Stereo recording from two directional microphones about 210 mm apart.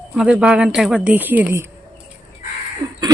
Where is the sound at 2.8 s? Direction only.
20° right (ahead or behind).